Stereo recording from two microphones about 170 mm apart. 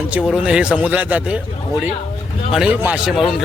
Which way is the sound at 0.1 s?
5° right (ahead or behind).